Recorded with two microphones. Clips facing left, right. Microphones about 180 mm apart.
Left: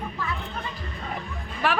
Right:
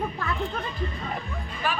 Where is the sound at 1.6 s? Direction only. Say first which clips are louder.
Left 4 dB; 85° left.